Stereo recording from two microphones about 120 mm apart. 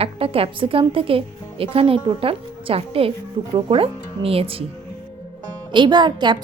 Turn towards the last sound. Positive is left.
turn(degrees=-40)  # may be behind; listen again after turning